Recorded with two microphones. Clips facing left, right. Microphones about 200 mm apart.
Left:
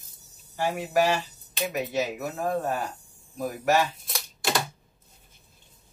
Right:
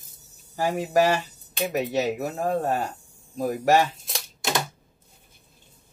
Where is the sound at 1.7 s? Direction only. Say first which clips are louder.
Right 4 dB; 35° right (ahead or behind).